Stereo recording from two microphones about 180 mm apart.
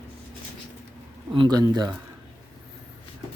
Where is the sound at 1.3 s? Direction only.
25° right (ahead or behind).